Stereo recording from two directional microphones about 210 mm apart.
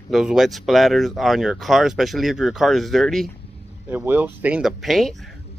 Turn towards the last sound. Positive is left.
turn(degrees=0)  # may be behind; listen again after turning